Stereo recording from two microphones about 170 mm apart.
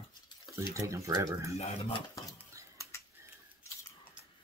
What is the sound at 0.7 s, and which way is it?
Speech, 15° right (ahead or behind).